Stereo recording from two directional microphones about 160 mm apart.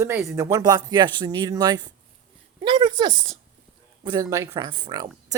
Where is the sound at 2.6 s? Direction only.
30° right (ahead or behind).